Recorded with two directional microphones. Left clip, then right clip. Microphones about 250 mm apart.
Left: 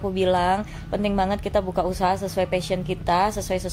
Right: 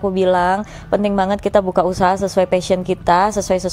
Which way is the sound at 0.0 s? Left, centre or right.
Right.